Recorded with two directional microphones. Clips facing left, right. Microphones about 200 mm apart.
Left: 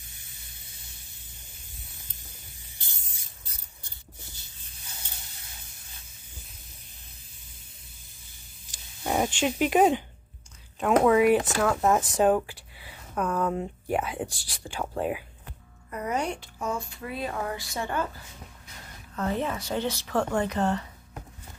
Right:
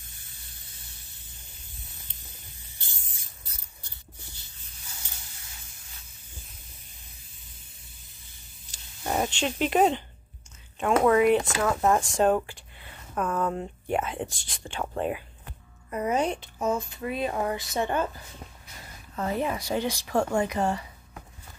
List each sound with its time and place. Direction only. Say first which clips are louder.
9.0 s speech: left 2 dB; 5° left (ahead or behind)
15.9 s speech: right 3 dB; 20° right (ahead or behind)
19.1 s speech: right 1 dB; 10° right (ahead or behind)